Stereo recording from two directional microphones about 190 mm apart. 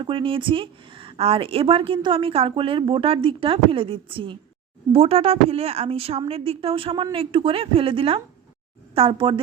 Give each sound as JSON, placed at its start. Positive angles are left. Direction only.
{"t": 0.0, "sound": "a woman's voice", "side_deg": -25}